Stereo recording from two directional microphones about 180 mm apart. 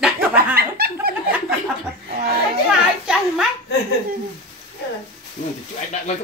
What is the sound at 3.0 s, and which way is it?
Speech, 5° right (ahead or behind).